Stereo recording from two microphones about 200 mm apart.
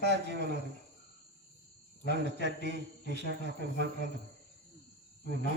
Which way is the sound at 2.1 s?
60° right (ahead or behind).